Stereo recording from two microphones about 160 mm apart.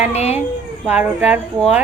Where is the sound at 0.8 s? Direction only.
10° right (ahead or behind).